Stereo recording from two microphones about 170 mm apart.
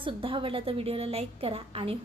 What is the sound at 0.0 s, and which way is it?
A woman's voice, 30° right (ahead or behind).